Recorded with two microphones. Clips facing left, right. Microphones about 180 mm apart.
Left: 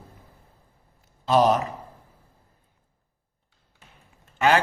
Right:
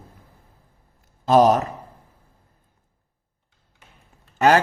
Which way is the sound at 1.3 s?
45° right (ahead or behind).